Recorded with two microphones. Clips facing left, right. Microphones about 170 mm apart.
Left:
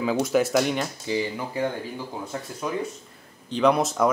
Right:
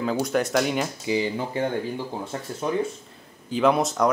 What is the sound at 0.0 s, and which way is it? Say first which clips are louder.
Speech: left 2 dB; 5° left (ahead or behind).